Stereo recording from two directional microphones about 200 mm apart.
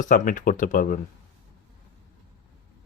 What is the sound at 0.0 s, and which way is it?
Speech, 40° left (ahead or behind).